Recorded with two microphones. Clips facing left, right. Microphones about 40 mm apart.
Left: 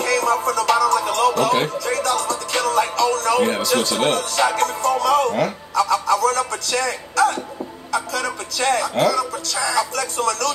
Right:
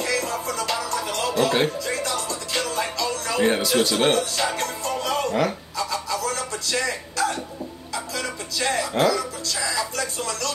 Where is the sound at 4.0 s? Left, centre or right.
Left.